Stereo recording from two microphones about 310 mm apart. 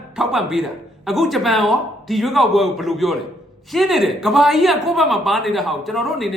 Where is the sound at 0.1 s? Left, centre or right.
Centre.